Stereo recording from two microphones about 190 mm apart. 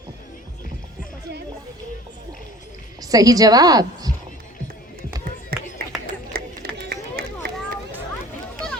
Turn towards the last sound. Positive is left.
turn(degrees=-50)  # may be behind; listen again after turning